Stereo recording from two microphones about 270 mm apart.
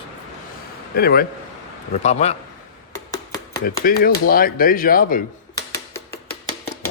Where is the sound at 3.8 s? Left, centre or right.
Left.